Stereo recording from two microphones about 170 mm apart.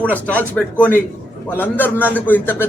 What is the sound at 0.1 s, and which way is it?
A man's voice, 10° left (ahead or behind).